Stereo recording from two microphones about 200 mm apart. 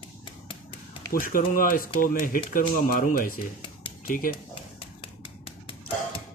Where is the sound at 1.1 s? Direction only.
45° left (ahead or behind).